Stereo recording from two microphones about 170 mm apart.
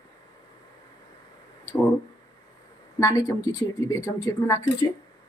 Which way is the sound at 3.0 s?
20° left (ahead or behind).